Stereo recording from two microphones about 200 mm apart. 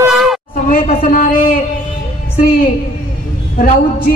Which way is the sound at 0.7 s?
45° left (ahead or behind).